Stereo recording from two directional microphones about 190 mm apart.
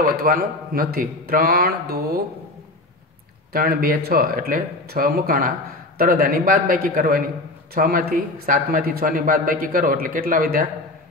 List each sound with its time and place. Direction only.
0.0 s a man's voice: 50° right (ahead or behind)
3.5 s a man's voice: 50° right (ahead or behind)